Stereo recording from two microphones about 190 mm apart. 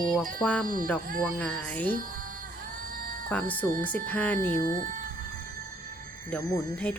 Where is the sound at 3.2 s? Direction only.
10° left (ahead or behind).